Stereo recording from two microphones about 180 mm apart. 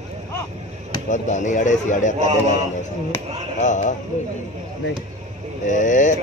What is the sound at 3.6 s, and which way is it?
Speech, 45° left (ahead or behind).